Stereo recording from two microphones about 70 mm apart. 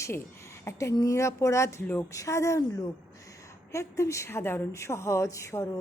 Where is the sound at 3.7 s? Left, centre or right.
Left.